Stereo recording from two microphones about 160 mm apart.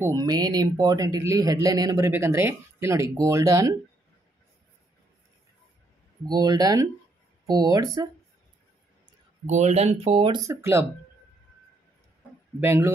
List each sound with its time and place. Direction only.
0.0 s speech: 20° right (ahead or behind)
6.2 s speech: 25° right (ahead or behind)
9.5 s speech: 45° right (ahead or behind)
10.4 s speech: 15° right (ahead or behind)
12.5 s speech: 15° right (ahead or behind)